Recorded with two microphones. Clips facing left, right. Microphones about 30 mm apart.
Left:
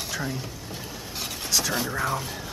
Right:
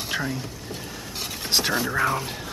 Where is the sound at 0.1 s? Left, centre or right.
Right.